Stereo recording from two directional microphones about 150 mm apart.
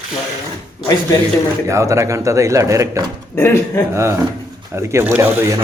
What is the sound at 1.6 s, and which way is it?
Speech, 20° right (ahead or behind).